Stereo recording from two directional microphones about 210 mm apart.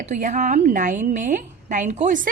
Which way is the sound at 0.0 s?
35° right (ahead or behind).